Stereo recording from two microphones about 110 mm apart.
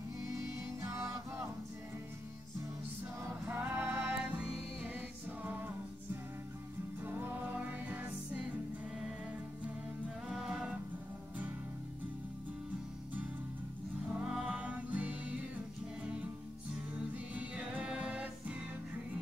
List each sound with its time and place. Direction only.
0.8 s music: 30° right (ahead or behind)
3.4 s music: 15° right (ahead or behind)
4.2 s music: 10° right (ahead or behind)
7.0 s music: 20° right (ahead or behind)
10.2 s music: 5° right (ahead or behind)
14.1 s music: 5° right (ahead or behind)